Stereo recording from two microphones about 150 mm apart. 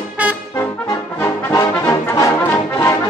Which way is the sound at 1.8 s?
20° left (ahead or behind).